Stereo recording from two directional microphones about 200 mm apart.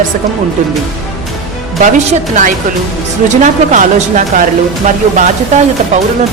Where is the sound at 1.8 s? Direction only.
40° right (ahead or behind).